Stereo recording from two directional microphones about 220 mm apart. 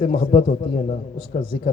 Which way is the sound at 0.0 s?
25° left (ahead or behind).